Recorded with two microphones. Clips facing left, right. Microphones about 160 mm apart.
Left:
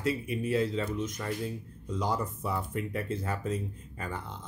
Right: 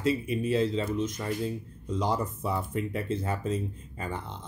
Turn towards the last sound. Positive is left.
turn(degrees=-25)  # may be behind; listen again after turning